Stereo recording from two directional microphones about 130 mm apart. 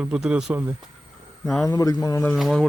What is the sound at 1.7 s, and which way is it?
Speech, 30° left (ahead or behind).